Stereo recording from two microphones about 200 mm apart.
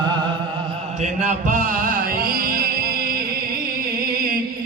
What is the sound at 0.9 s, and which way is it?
Music, 35° right (ahead or behind).